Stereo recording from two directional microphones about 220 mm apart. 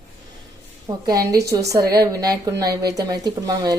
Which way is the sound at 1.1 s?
15° right (ahead or behind).